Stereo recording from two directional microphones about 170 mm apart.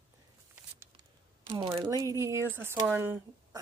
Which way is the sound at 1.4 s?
30° right (ahead or behind).